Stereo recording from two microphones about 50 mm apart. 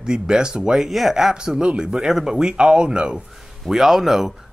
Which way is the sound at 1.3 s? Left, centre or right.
Centre.